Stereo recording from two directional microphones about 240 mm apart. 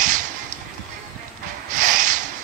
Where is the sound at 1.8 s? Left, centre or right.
Right.